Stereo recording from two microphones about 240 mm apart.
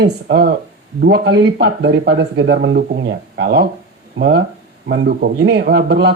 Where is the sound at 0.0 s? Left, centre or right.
Right.